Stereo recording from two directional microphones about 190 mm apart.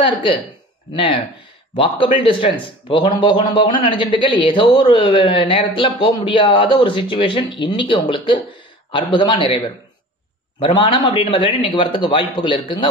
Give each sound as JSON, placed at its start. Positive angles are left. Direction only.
{"t": 0.0, "sound": "a man's voice", "side_deg": 25}
{"t": 10.6, "sound": "a man's voice", "side_deg": 30}